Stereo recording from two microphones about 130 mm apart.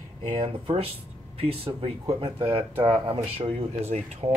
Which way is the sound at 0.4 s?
40° right (ahead or behind).